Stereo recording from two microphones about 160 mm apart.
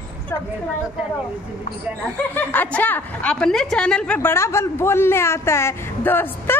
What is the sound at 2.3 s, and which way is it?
A woman's voice, 10° left (ahead or behind).